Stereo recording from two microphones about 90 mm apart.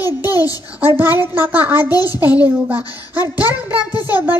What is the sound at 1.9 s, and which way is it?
Speech, 45° left (ahead or behind).